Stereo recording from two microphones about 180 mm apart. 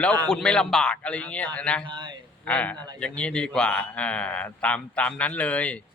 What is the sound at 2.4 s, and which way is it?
A man's voice, 5° left (ahead or behind).